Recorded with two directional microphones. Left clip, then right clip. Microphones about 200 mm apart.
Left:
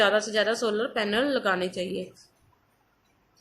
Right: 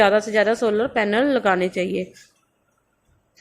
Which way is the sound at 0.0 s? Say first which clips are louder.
Right 6 dB; 35° right (ahead or behind).